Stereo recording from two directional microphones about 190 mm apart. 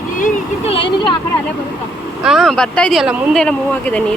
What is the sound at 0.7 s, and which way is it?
Speech, 25° left (ahead or behind).